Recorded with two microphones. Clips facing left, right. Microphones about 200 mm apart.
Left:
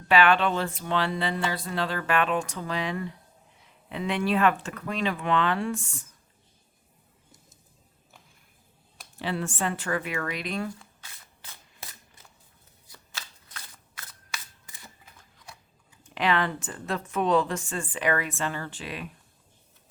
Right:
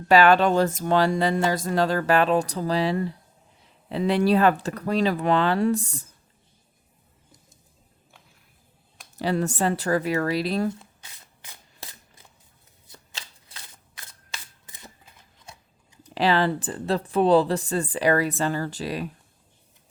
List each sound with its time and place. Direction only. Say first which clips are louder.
0.1 s speech: right 5 dB; 40° right (ahead or behind)
9.1 s speech: right 6 dB; 40° right (ahead or behind)
10.7 s shuffling cards: right 8 dB; 20° right (ahead or behind)
12.9 s shuffling cards: right 1 dB; 25° right (ahead or behind)
16.0 s speech: right 5 dB; 35° right (ahead or behind)